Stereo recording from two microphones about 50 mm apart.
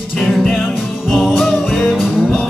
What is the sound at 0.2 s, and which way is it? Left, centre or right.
Music, centre.